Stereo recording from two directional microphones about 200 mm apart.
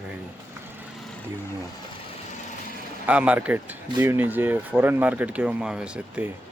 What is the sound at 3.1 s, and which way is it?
Speech, 5° right (ahead or behind).